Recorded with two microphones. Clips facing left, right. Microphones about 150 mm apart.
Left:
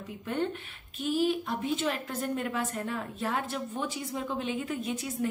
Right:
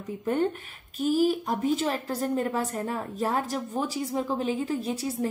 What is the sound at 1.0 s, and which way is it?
A woman's voice, 40° right (ahead or behind).